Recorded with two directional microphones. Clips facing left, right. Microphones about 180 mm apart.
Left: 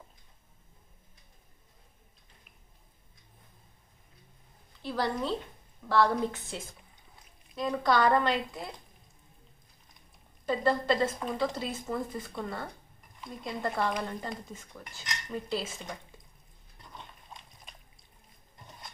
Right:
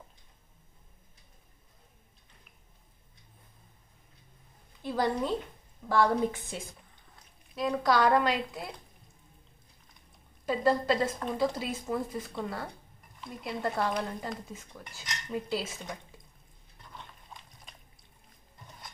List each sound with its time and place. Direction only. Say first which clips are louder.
4.8 s speech: right 2 dB; 15° right (ahead or behind)
10.4 s speech: right 1 dB; 10° right (ahead or behind)